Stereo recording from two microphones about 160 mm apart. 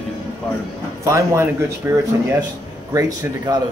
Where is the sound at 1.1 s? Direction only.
20° right (ahead or behind).